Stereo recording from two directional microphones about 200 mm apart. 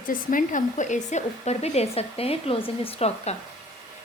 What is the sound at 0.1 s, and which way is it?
Speech, 45° left (ahead or behind).